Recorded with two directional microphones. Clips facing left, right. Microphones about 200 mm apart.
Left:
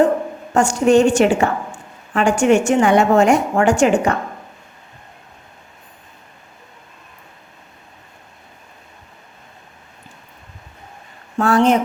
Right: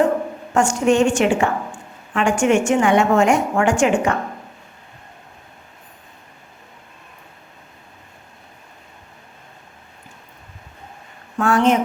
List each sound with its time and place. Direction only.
0.5 s a woman's voice: 35° left (ahead or behind)
11.3 s a woman's voice: 35° left (ahead or behind)